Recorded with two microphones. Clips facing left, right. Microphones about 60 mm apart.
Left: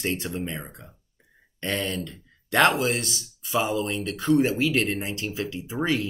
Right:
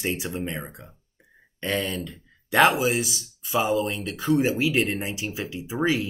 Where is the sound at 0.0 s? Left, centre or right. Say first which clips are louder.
Even; centre.